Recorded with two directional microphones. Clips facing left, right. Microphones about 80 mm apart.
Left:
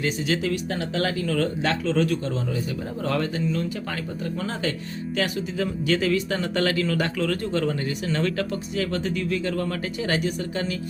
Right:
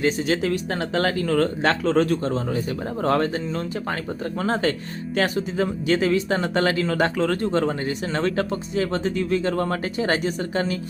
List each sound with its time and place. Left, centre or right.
0.0 s speech: right